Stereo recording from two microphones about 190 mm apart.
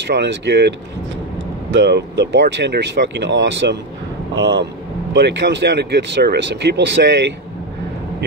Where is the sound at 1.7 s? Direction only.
65° right (ahead or behind).